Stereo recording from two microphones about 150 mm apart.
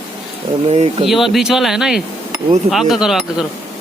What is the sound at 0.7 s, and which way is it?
Speech, 45° right (ahead or behind).